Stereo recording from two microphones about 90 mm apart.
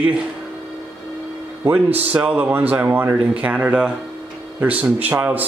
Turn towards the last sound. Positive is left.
turn(degrees=-20)  # may be behind; listen again after turning